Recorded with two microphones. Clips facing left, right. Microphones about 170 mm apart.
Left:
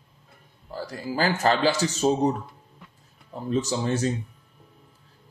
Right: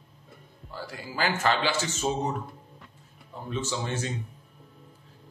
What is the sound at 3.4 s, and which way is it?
Speech, 40° left (ahead or behind).